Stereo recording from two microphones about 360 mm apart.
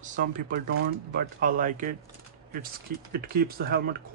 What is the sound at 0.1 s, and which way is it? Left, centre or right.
Speech, right.